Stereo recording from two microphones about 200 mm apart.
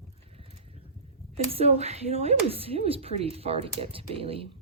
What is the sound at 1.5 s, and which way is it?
Speech, 30° right (ahead or behind).